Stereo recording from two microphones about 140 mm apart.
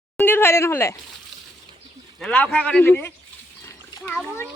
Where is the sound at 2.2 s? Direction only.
10° left (ahead or behind).